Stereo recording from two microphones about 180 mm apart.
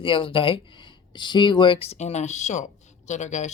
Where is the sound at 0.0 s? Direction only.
30° left (ahead or behind).